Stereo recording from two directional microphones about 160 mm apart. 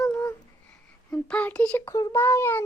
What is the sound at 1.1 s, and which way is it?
A child's voice, 5° left (ahead or behind).